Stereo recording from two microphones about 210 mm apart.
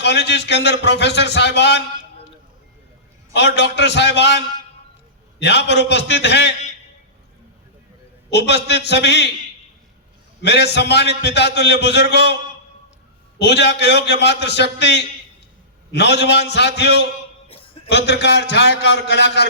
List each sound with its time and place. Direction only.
0.0 s a man's voice: 55° left (ahead or behind)
3.3 s a man's voice: 55° left (ahead or behind)
8.3 s a man's voice: 55° left (ahead or behind)
10.4 s a man's voice: 55° left (ahead or behind)
13.4 s a man's voice: 55° left (ahead or behind)